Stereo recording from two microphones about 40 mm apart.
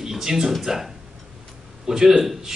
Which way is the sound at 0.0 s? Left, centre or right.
Centre.